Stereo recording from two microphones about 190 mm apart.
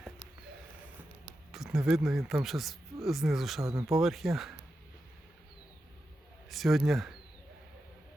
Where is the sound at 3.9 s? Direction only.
Centre (ahead or behind).